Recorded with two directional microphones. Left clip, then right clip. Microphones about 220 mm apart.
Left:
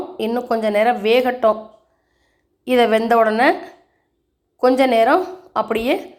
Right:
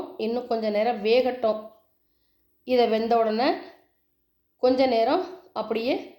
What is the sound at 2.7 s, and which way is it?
Speech, 10° left (ahead or behind).